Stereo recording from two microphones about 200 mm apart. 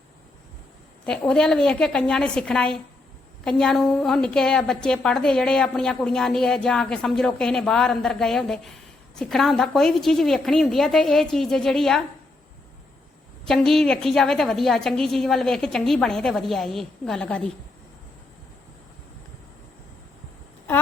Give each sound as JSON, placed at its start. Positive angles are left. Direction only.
{"t": 1.0, "sound": "a woman's voice", "side_deg": 5}
{"t": 13.4, "sound": "a woman's voice", "side_deg": 0}